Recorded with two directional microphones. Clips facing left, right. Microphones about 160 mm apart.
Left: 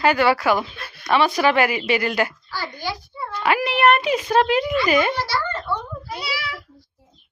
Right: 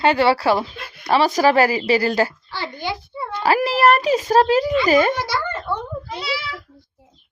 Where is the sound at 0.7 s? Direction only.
20° right (ahead or behind).